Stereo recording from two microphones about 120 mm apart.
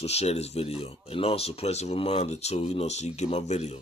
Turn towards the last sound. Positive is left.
turn(degrees=65)  # may be behind; listen again after turning